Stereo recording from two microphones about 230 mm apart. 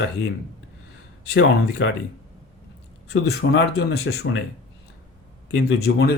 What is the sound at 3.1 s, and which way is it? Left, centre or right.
Speech, left.